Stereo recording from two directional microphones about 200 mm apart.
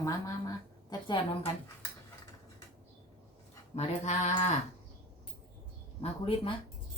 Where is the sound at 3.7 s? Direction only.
35° left (ahead or behind).